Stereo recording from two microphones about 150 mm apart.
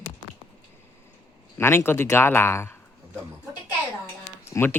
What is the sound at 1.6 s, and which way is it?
Speech, 15° left (ahead or behind).